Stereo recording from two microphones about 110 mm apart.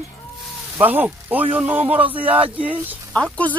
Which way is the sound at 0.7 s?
15° right (ahead or behind).